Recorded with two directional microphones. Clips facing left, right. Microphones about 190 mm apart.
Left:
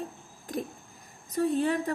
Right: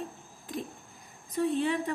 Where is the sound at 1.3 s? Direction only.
40° left (ahead or behind).